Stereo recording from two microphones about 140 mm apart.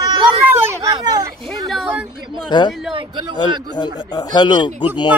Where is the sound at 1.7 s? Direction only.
Centre (ahead or behind).